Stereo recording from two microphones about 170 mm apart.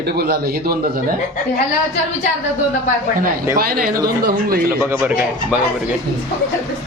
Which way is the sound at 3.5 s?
60° right (ahead or behind).